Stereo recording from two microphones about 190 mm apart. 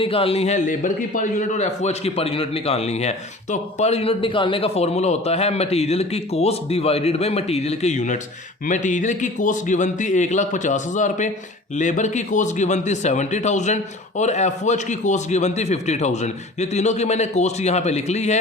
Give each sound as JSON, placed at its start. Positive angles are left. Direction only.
{"t": 0.0, "sound": "a man's voice", "side_deg": 30}